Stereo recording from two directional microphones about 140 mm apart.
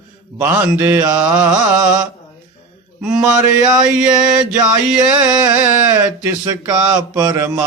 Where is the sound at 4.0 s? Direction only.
5° right (ahead or behind).